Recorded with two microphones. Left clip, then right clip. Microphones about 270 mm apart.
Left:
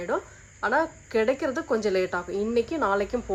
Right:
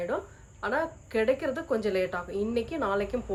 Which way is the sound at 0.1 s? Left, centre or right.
Left.